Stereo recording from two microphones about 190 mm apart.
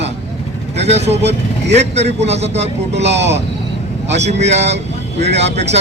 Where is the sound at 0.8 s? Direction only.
35° right (ahead or behind).